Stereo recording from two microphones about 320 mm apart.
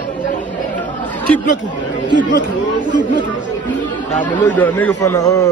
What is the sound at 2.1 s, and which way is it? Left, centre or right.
Speech, left.